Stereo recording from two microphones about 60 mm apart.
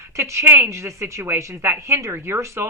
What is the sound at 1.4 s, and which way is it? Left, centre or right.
A woman's voice, right.